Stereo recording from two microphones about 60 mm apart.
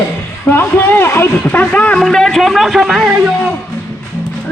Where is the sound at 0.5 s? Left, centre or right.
Left.